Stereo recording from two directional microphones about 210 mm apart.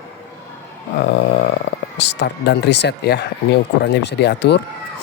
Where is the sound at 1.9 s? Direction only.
55° left (ahead or behind).